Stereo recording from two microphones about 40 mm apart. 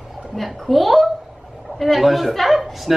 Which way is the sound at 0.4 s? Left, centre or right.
Centre.